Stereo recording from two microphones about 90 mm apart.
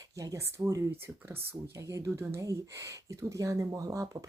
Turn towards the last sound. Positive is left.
turn(degrees=-40)  # may be behind; listen again after turning